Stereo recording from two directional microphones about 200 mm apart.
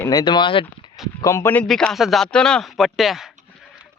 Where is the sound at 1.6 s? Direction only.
Centre (ahead or behind).